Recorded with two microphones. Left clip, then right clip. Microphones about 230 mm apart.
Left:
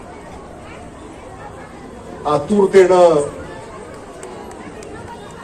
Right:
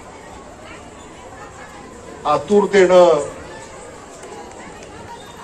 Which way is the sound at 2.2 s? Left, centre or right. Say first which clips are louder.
Even; right.